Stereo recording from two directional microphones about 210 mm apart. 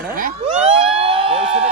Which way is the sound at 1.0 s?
25° right (ahead or behind).